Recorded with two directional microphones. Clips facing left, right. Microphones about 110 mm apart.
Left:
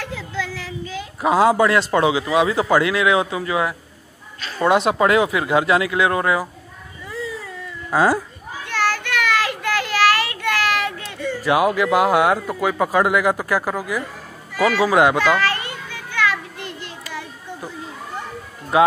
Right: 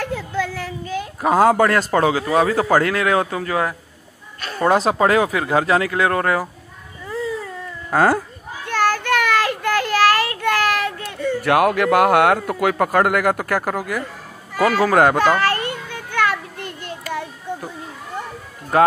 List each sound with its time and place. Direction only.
0.0 s a sound: 50° right (ahead or behind)
2.0 s speech: 45° right (ahead or behind)
7.9 s speech: 50° right (ahead or behind)
8.6 s child singing: 45° right (ahead or behind); by 12.5 s 60° right (ahead or behind)
12.6 s speech: 60° right (ahead or behind)
14.5 s children playing: 45° right (ahead or behind)